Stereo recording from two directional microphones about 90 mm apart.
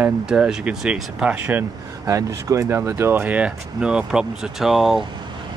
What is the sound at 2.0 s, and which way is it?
Speech, 35° right (ahead or behind).